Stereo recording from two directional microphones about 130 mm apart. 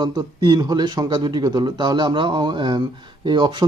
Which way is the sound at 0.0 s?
35° right (ahead or behind).